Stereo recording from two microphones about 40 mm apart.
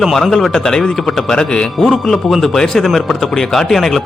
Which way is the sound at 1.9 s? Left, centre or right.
Centre.